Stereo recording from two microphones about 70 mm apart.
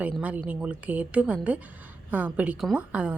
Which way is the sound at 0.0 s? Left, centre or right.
Right.